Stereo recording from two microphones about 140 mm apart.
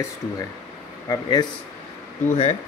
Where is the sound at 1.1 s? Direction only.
30° left (ahead or behind).